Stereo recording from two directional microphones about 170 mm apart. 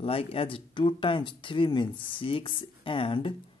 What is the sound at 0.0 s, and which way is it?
Speech, 35° left (ahead or behind).